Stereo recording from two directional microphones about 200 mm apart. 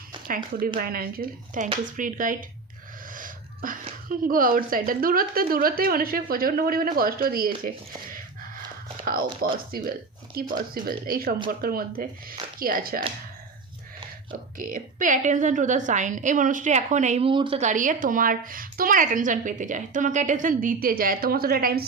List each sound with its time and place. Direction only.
0.3 s a woman's voice: 45° right (ahead or behind)
3.1 s a sound: 45° right (ahead or behind)
4.1 s a woman's voice: 45° right (ahead or behind)
9.4 s a woman's voice: 50° right (ahead or behind)
14.6 s a woman's voice: 40° right (ahead or behind); by 17.6 s 25° right (ahead or behind)
17.6 s a woman's voice: 40° right (ahead or behind)